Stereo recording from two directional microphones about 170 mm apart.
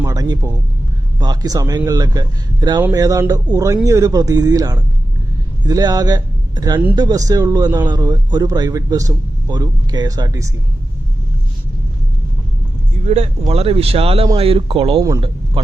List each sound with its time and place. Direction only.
0.0 s a sound: 20° right (ahead or behind)
1.2 s a man's voice: 25° right (ahead or behind)
13.1 s speech: 40° right (ahead or behind)